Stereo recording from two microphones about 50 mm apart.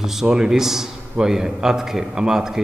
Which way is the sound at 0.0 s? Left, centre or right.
Centre.